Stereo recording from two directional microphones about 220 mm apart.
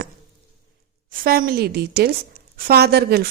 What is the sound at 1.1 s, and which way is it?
A woman's voice, 40° right (ahead or behind).